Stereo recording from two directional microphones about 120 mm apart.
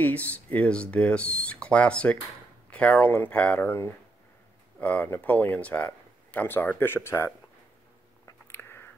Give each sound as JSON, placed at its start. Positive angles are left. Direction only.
{"t": 0.0, "sound": "speech", "side_deg": 10}
{"t": 8.5, "sound": "biting", "side_deg": 20}